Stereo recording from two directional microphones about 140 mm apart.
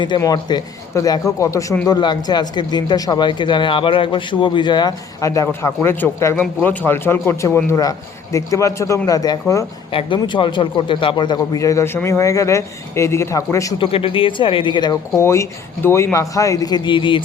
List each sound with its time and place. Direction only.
0.2 s a man's voice: 30° left (ahead or behind)
9.9 s a man's voice: 40° left (ahead or behind)
13.7 s speech: 40° left (ahead or behind)
15.1 s a man's voice: 20° left (ahead or behind); by 17.2 s 35° left (ahead or behind)